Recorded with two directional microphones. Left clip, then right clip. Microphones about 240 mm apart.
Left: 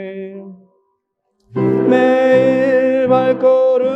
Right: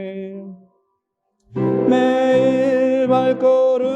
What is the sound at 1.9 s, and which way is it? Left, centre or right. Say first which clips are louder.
Music: left 4 dB; right.